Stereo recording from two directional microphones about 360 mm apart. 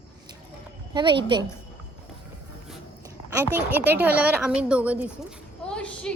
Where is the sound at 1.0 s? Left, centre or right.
Centre.